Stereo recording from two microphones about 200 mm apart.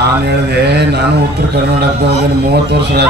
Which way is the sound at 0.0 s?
55° right (ahead or behind).